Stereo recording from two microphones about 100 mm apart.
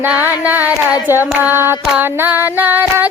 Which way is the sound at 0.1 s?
15° right (ahead or behind).